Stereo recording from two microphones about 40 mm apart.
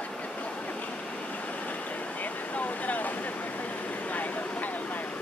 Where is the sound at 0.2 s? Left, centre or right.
Left.